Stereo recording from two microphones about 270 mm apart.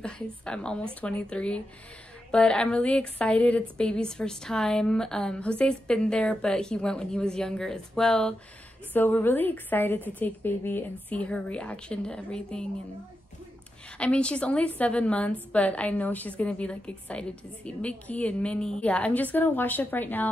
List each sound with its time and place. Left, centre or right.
0.0 s a woman's voice: centre
13.9 s a woman's voice: centre